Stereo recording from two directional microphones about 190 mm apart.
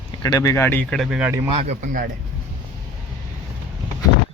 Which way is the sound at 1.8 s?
45° right (ahead or behind).